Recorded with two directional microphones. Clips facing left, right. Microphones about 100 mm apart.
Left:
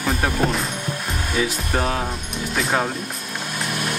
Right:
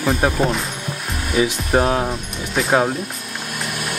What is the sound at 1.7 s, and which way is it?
Speech, 25° right (ahead or behind).